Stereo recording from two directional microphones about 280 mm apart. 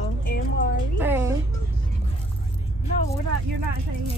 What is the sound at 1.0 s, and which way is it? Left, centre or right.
Speech, centre.